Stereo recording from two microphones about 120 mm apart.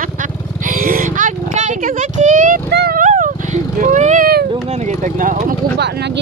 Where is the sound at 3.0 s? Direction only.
90° right.